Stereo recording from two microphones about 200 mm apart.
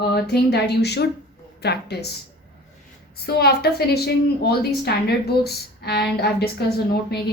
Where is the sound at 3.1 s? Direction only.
50° left (ahead or behind).